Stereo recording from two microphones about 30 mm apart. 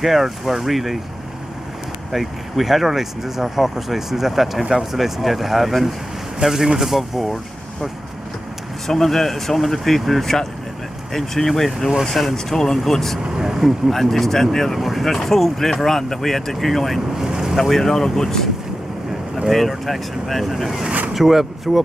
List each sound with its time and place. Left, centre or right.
0.0 s speech: centre
2.1 s speech: centre
6.4 s speech: centre
6.9 s speech: centre
8.8 s speech: centre
13.4 s speech: centre
13.8 s speech: centre
17.1 s vehicle: centre
17.6 s speech: centre
19.9 s speech: centre